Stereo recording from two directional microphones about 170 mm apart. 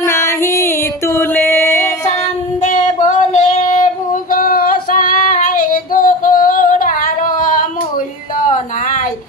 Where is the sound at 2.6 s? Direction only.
45° left (ahead or behind).